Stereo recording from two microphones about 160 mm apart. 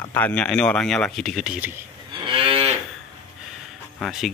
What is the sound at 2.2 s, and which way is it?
Moo, 35° right (ahead or behind).